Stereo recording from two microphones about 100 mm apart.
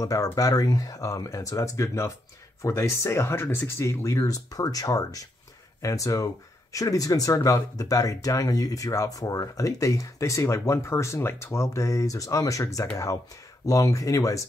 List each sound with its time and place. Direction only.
0.0 s speech: 35° left (ahead or behind)